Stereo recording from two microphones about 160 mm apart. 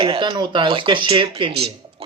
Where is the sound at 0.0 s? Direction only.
30° right (ahead or behind).